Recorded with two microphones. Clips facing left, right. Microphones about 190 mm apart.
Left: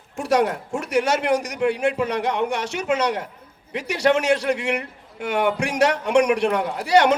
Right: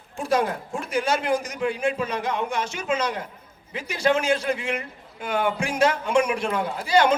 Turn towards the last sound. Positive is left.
turn(degrees=70)  # may be behind; listen again after turning